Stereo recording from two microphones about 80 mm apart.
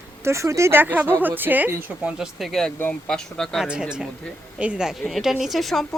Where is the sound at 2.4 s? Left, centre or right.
Centre.